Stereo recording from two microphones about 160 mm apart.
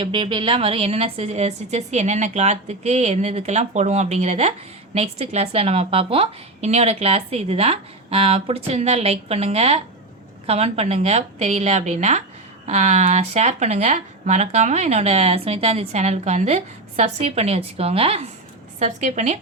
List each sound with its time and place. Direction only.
0.0 s a woman's voice: 30° right (ahead or behind)
18.8 s a woman's voice: 50° right (ahead or behind)